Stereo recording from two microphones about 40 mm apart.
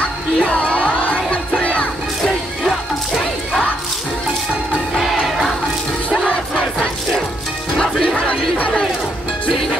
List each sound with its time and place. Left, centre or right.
0.0 s music: left
4.9 s music: centre
7.7 s music: centre
8.3 s chatter: left